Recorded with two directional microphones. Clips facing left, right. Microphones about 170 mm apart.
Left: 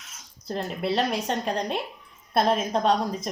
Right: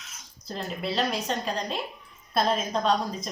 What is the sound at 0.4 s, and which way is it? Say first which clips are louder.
A woman's voice: left 4 dB; 60° left (ahead or behind).